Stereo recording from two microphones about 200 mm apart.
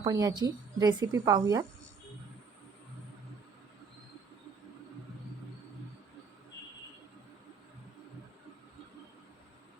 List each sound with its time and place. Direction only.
0.0 s a woman's voice: 20° right (ahead or behind)